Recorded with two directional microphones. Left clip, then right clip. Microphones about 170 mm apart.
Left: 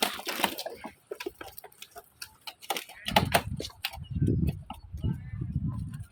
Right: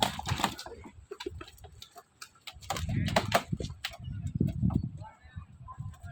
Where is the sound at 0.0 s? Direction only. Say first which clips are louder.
Left 1 dB; 10° right (ahead or behind).